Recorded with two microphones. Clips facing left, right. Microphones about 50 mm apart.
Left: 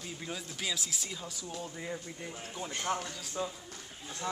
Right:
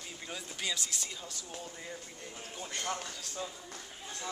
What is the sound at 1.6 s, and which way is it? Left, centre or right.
Speech, centre.